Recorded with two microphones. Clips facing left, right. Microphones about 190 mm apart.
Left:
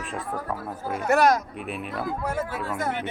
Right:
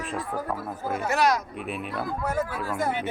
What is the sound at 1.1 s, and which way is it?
Speech, 50° left (ahead or behind).